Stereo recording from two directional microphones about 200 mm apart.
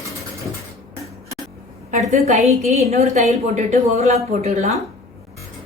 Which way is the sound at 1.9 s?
35° right (ahead or behind).